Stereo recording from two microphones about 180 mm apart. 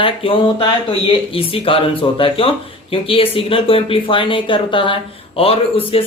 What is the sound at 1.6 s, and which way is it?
Speech, 30° left (ahead or behind).